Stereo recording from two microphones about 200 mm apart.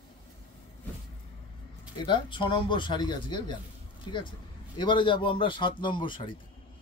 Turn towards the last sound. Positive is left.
turn(degrees=25)  # may be behind; listen again after turning